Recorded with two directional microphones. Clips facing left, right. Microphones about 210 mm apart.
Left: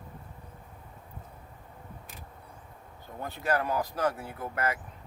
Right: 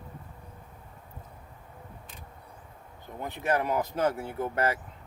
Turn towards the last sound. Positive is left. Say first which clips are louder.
# right 4 dB
turn(degrees=-25)  # may be behind; listen again after turning